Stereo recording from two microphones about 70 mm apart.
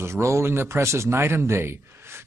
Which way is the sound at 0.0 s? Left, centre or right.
Right.